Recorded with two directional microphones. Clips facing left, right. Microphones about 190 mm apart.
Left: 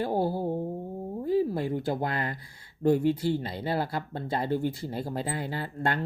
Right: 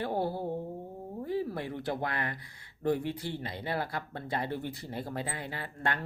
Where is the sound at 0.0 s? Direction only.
35° left (ahead or behind).